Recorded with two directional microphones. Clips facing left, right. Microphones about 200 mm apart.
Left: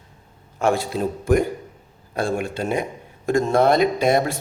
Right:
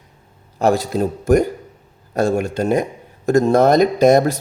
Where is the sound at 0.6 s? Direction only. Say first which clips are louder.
Right 4 dB; 40° right (ahead or behind).